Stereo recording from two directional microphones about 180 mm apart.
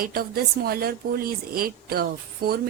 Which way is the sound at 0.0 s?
55° right (ahead or behind).